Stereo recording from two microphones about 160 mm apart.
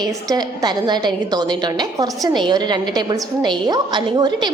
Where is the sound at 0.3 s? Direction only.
25° right (ahead or behind).